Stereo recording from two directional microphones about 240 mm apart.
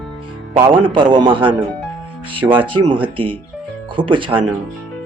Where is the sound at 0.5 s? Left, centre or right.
Centre.